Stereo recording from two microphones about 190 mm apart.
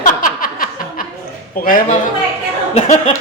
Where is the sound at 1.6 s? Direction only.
45° left (ahead or behind).